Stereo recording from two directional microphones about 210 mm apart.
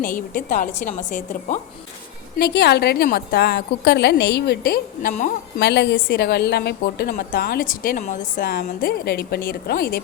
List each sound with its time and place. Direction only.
0.0 s a woman's voice: 40° left (ahead or behind)
2.4 s a woman's voice: 50° left (ahead or behind)
5.5 s a woman's voice: 55° left (ahead or behind)